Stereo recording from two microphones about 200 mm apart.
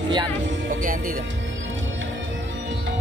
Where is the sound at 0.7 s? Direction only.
40° right (ahead or behind).